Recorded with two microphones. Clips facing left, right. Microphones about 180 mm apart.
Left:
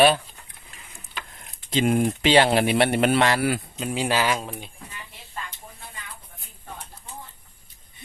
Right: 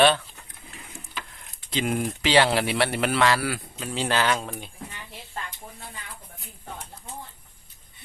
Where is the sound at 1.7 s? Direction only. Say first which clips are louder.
Left 5 dB; 25° left (ahead or behind); by 4.7 s 5° left (ahead or behind).